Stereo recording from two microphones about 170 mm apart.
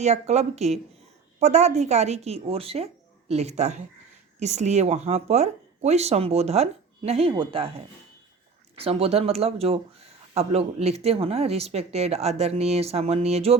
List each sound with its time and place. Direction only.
0.0 s speech: 40° right (ahead or behind)
8.7 s speech: 35° right (ahead or behind)